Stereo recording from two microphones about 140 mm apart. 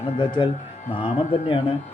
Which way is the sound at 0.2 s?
35° left (ahead or behind).